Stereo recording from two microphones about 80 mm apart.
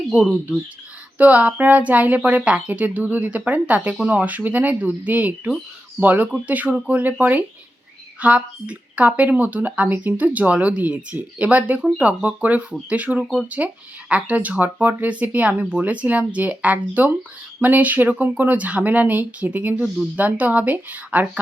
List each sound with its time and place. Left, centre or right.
1.2 s speech: centre